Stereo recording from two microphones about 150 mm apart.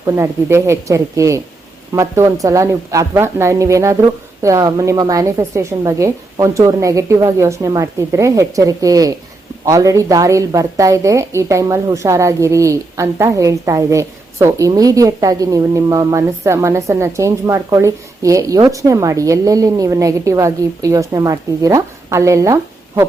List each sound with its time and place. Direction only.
0.0 s a woman's voice: 20° right (ahead or behind)